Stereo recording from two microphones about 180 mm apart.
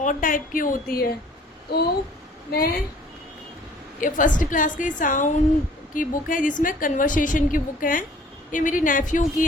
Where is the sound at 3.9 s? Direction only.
45° left (ahead or behind).